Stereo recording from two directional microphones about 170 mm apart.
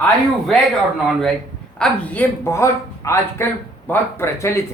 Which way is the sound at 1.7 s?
5° left (ahead or behind).